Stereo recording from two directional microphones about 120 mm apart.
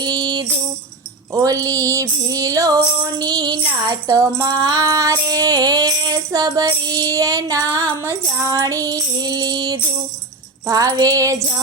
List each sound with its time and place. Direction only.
0.0 s music: 35° right (ahead or behind)
1.3 s a sound: 30° right (ahead or behind)
3.2 s music: 35° right (ahead or behind)